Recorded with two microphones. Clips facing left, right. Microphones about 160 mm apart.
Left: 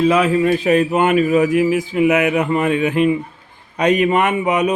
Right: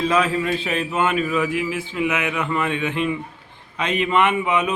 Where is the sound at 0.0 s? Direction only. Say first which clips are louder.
Left 6 dB; 30° left (ahead or behind).